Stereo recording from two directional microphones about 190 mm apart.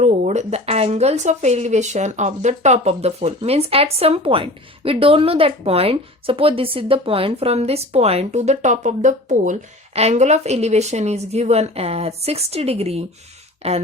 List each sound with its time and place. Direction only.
0.0 s speech: 35° right (ahead or behind)